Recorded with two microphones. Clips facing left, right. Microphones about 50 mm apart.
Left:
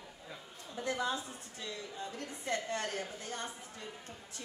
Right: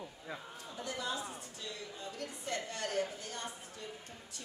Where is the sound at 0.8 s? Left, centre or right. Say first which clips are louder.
Left 5 dB; left.